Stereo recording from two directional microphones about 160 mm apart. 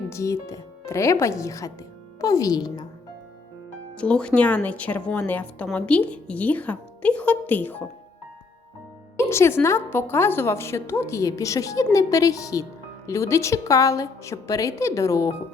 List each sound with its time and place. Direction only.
0.1 s a woman's voice: 20° left (ahead or behind)
3.9 s a woman's voice: 5° left (ahead or behind)
9.1 s a woman's voice: 15° left (ahead or behind)